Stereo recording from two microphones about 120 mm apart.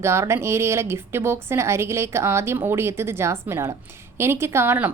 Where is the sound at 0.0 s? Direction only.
20° right (ahead or behind).